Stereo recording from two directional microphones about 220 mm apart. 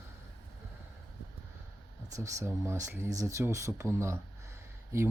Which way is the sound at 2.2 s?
15° right (ahead or behind).